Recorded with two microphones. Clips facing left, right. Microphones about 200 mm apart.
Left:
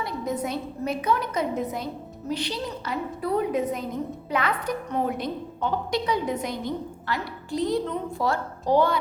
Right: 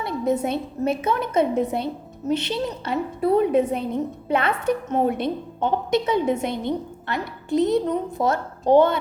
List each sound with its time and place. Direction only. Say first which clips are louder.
0.0 s a woman's voice: right 6 dB; 25° right (ahead or behind)